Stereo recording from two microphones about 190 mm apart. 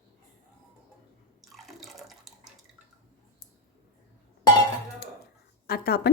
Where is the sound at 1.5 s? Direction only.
Centre (ahead or behind).